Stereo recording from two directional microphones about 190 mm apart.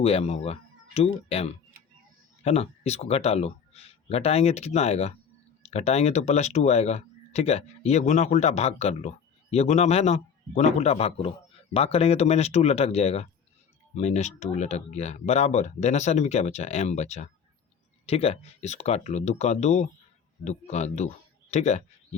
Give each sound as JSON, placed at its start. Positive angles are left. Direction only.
{"t": 0.0, "sound": "speech", "side_deg": 35}
{"t": 1.7, "sound": "a sound", "side_deg": -50}
{"t": 2.4, "sound": "speech", "side_deg": 35}